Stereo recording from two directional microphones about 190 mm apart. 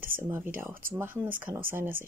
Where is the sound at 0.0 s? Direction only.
10° right (ahead or behind).